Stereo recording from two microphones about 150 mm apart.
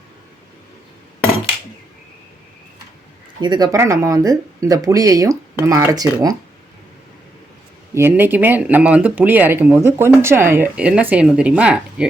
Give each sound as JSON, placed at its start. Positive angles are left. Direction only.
{"t": 3.4, "sound": "speech", "side_deg": -30}
{"t": 7.9, "sound": "speech", "side_deg": -15}